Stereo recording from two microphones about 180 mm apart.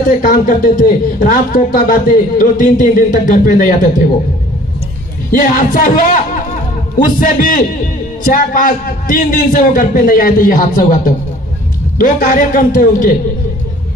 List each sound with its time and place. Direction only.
0.2 s speech: 50° left (ahead or behind)
5.3 s speech: 50° left (ahead or behind)
7.0 s speech: 50° left (ahead or behind)